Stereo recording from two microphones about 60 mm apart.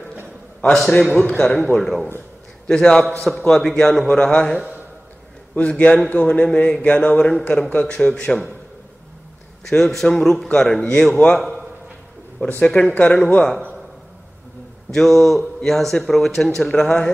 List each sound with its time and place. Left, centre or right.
0.7 s a man's voice: centre
9.7 s a man's voice: centre
12.6 s speech: centre
14.9 s speech: centre